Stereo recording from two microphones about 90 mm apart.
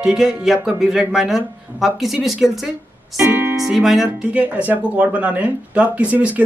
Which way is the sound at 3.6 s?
5° right (ahead or behind).